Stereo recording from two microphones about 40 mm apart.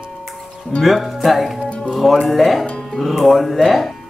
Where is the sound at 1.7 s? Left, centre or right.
Left.